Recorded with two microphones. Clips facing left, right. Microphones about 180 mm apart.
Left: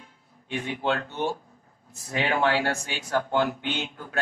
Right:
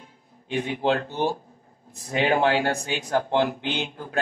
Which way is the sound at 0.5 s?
35° right (ahead or behind).